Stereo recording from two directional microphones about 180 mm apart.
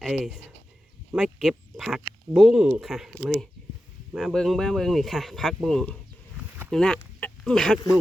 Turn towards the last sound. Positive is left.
turn(degrees=5)  # may be behind; listen again after turning